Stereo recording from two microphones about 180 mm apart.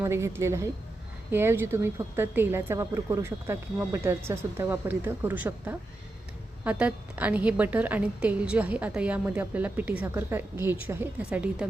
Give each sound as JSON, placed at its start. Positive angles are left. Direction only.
{"t": 0.0, "sound": "a woman's voice", "side_deg": -15}